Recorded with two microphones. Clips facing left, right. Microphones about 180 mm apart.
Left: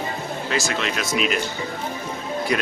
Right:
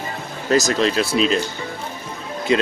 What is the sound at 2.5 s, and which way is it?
Speech, 25° right (ahead or behind).